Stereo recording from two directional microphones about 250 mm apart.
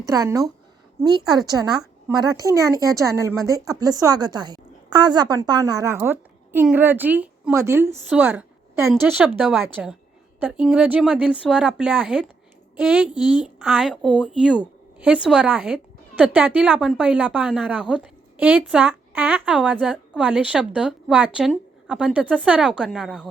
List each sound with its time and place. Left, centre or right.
0.0 s a woman's voice: centre